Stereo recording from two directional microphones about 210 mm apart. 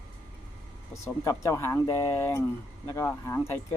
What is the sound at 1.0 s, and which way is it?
Speech, 15° left (ahead or behind).